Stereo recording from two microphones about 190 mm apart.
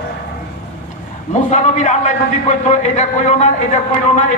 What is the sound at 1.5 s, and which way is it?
A man's voice, 40° left (ahead or behind).